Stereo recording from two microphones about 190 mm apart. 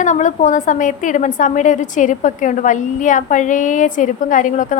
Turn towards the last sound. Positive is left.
turn(degrees=45)  # may be behind; listen again after turning